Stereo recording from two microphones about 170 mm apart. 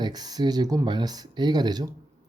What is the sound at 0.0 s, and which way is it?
Speech, 25° right (ahead or behind).